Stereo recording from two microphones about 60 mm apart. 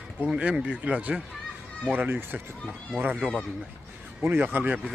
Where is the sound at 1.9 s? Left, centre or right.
Right.